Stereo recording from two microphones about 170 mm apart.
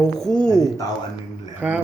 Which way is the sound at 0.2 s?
5° left (ahead or behind).